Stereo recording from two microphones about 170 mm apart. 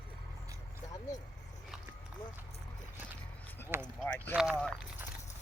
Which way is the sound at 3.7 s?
15° right (ahead or behind).